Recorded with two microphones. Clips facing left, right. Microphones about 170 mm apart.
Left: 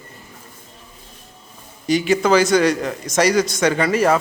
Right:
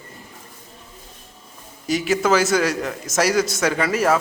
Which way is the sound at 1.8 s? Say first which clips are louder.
Left 3 dB; centre (ahead or behind).